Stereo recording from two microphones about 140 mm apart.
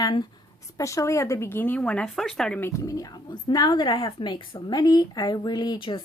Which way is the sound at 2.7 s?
20° left (ahead or behind).